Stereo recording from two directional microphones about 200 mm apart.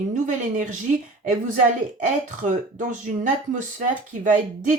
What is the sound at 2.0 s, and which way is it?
Speech, 40° right (ahead or behind).